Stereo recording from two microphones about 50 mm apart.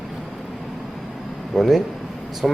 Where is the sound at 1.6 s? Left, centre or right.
Centre.